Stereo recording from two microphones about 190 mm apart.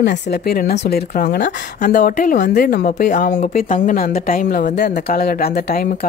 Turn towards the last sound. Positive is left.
turn(degrees=50)  # may be behind; listen again after turning